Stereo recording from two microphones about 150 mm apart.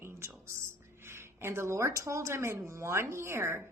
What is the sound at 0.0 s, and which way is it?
Whispering, 15° right (ahead or behind).